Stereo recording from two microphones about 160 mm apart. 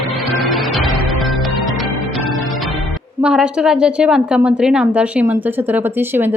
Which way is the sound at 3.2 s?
5° right (ahead or behind).